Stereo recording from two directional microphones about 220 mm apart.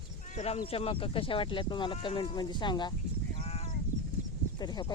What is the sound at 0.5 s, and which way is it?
Speech, 25° left (ahead or behind).